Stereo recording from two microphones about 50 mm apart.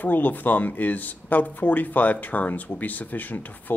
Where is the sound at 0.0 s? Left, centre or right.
Left.